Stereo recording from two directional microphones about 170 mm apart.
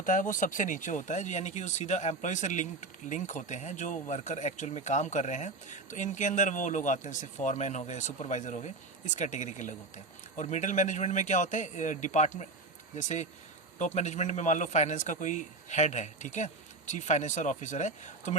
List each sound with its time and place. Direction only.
0.0 s speech: 50° left (ahead or behind)